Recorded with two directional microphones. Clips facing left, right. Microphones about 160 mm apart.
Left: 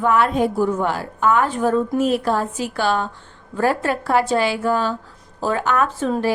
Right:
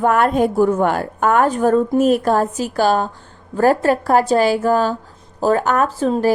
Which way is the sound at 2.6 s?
40° right (ahead or behind).